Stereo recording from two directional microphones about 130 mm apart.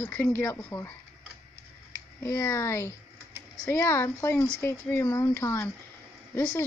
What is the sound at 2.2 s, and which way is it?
Speech, 20° left (ahead or behind).